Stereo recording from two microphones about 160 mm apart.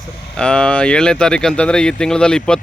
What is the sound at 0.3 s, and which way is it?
Speech, 5° left (ahead or behind).